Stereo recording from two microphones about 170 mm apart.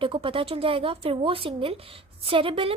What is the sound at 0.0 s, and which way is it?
Speech, 30° right (ahead or behind).